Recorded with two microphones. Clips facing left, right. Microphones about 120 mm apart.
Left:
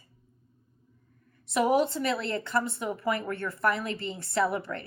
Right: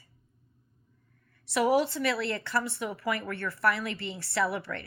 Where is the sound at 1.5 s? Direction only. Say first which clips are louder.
Left 1 dB; 25° left (ahead or behind).